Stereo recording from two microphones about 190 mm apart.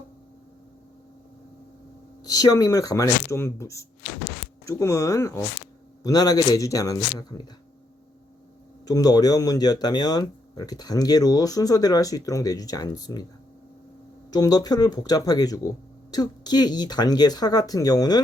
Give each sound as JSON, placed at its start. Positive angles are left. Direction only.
{"t": 2.2, "sound": "speech", "side_deg": 20}
{"t": 8.9, "sound": "speech", "side_deg": 20}
{"t": 14.3, "sound": "speech", "side_deg": 20}